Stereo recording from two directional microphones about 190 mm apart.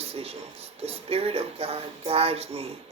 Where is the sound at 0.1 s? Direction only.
30° right (ahead or behind).